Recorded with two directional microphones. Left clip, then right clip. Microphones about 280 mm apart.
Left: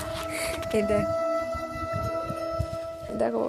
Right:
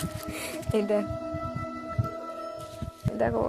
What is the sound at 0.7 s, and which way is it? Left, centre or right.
Speech, centre.